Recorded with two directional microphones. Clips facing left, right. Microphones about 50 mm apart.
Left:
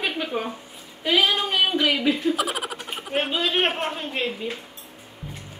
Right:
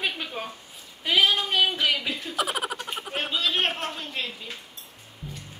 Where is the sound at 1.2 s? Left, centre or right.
Centre.